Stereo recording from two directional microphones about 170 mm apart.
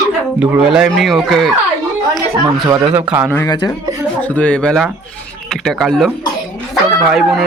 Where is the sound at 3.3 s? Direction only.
20° left (ahead or behind).